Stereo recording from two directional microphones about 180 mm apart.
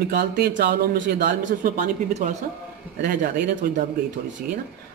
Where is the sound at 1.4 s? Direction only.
45° right (ahead or behind).